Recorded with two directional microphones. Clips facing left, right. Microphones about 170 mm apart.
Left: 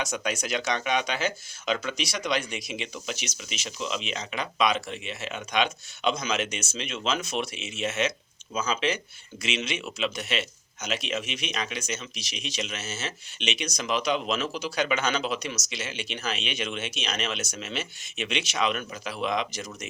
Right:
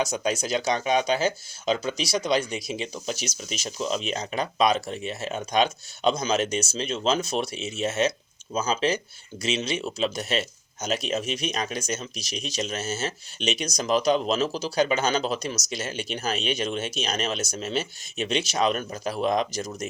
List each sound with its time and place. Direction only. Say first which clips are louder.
0.0 s speech: right 4 dB; 35° right (ahead or behind)